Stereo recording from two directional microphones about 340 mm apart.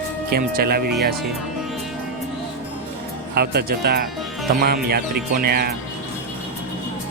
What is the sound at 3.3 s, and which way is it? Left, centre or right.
Speech, right.